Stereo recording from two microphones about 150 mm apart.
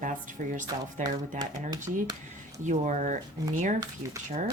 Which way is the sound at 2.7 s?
55° right (ahead or behind).